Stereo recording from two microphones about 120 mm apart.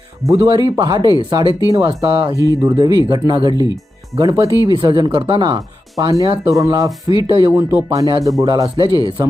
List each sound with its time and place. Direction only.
0.3 s speech: 35° right (ahead or behind)
6.0 s speech: 30° right (ahead or behind)